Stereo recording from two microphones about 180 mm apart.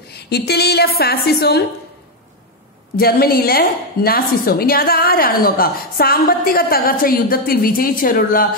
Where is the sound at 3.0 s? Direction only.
55° left (ahead or behind).